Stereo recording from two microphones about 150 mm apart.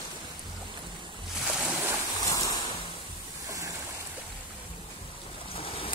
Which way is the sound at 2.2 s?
25° left (ahead or behind).